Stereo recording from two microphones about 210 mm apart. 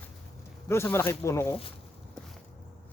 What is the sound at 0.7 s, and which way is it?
Speech, 10° left (ahead or behind).